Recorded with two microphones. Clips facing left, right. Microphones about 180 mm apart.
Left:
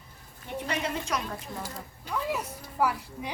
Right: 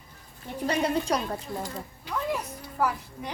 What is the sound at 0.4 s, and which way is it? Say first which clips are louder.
Speech: right 5 dB; 35° right (ahead or behind).